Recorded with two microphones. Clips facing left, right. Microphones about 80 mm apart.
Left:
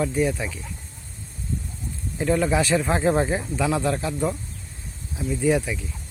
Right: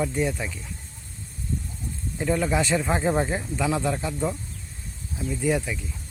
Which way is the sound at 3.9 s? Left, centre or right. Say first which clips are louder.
Left 2 dB; centre.